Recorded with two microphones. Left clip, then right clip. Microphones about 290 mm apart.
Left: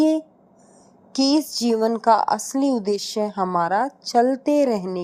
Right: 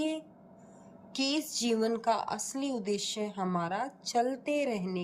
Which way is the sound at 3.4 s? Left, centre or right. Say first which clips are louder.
Left 13 dB; left.